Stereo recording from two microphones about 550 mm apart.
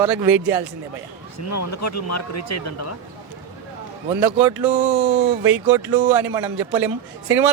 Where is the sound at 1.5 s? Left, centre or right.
Left.